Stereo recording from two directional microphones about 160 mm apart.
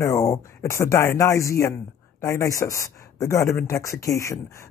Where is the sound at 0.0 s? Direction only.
20° left (ahead or behind).